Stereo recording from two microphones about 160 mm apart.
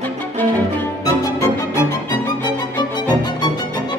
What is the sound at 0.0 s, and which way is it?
Music, 10° left (ahead or behind).